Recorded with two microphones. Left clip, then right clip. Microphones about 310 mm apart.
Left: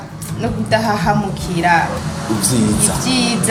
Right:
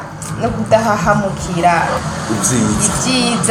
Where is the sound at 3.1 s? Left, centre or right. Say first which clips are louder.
Right 1 dB; left.